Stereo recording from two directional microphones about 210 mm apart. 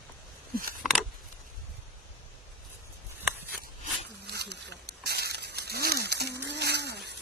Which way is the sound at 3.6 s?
50° right (ahead or behind).